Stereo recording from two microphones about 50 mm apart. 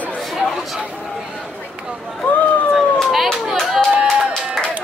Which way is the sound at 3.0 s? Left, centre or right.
Centre.